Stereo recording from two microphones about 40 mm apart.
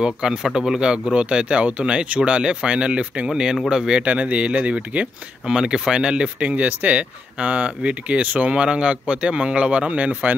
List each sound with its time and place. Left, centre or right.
0.0 s speech: centre
3.3 s speech: centre
4.0 s speech: right
5.5 s speech: centre; by 8.5 s right
8.5 s speech: right